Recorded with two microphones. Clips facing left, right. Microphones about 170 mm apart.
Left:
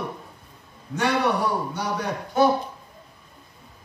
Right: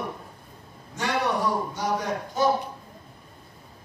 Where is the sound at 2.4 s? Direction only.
65° left (ahead or behind).